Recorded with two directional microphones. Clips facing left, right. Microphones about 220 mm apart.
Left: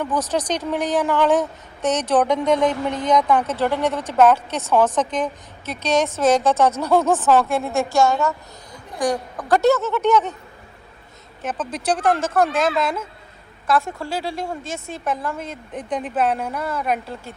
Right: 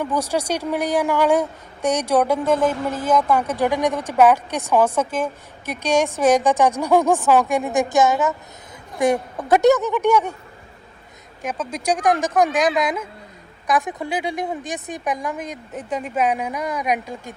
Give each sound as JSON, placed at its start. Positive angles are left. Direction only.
{"t": 0.0, "sound": "a woman's voice", "side_deg": -10}
{"t": 11.4, "sound": "a woman's voice", "side_deg": -10}